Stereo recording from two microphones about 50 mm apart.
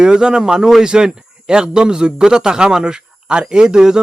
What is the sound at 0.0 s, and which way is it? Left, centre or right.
A man's voice, centre.